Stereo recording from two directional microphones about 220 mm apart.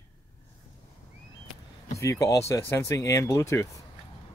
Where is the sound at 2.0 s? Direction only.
15° left (ahead or behind).